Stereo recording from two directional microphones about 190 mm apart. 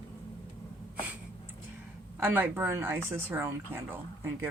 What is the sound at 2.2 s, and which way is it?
Speech, 10° right (ahead or behind).